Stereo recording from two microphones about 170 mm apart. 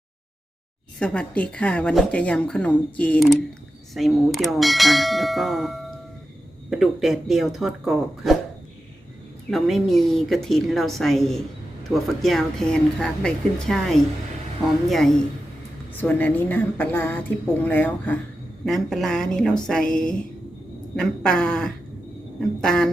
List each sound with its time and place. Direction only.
0.9 s a woman's voice: 5° left (ahead or behind)
9.5 s a woman's voice: centre (ahead or behind)